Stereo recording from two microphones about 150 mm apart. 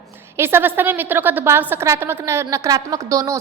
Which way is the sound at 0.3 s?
15° right (ahead or behind).